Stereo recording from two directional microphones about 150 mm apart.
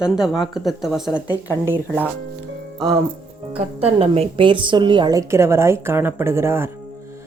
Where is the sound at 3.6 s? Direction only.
40° right (ahead or behind).